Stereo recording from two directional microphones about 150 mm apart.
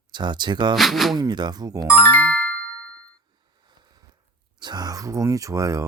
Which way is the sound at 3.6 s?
30° right (ahead or behind).